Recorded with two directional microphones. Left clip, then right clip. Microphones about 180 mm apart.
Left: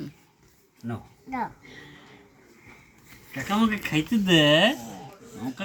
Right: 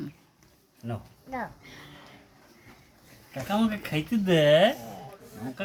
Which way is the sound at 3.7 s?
15° right (ahead or behind).